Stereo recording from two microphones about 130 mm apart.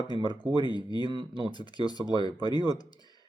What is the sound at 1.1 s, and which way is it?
Speech, 40° right (ahead or behind).